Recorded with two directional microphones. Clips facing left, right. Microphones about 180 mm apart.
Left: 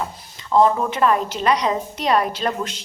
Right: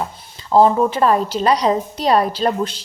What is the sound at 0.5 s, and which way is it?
A woman's voice, 30° right (ahead or behind).